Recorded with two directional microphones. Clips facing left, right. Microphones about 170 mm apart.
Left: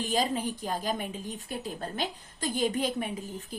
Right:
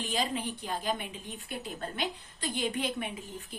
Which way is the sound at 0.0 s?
40° left (ahead or behind).